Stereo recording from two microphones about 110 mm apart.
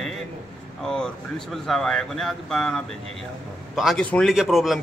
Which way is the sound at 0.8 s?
5° left (ahead or behind).